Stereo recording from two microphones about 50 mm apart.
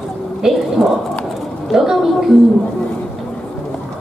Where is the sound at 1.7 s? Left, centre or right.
Centre.